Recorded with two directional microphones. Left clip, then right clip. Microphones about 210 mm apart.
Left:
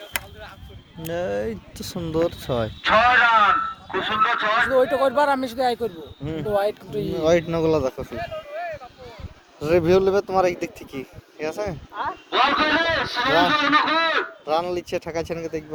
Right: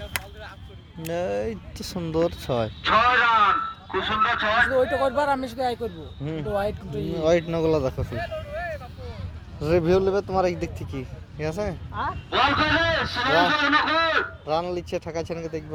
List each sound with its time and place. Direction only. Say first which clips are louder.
0.1 s chop: left 2 dB; 5° left (ahead or behind)
1.0 s speech: left 1 dB; 10° right (ahead or behind)
2.8 s speech: left 3 dB; 35° left (ahead or behind)
4.1 s a man's voice: left 2 dB; 25° right (ahead or behind)
4.7 s speech: left 3 dB; 40° left (ahead or behind)
7.1 s speech: left 2 dB; centre (ahead or behind)
8.1 s a sound: left 1 dB; 50° right (ahead or behind)
9.6 s speech: left 3 dB; centre (ahead or behind)
12.3 s a man's voice: left 2 dB; 25° right (ahead or behind)
14.4 s speech: left 3 dB; 5° left (ahead or behind)